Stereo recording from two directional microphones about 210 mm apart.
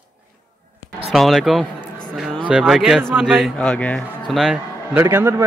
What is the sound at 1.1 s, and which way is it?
A man's voice, centre (ahead or behind).